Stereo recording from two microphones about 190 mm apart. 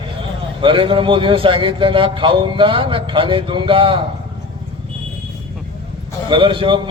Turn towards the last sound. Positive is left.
turn(degrees=-25)  # may be behind; listen again after turning